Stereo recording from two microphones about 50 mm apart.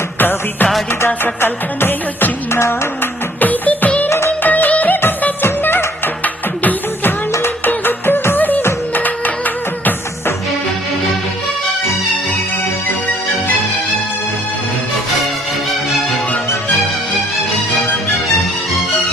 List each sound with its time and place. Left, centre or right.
0.2 s music: left
2.5 s music: left
3.4 s music: left
6.2 s music: left